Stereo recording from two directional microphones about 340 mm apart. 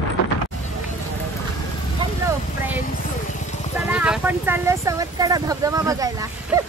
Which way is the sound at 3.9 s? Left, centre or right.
Centre.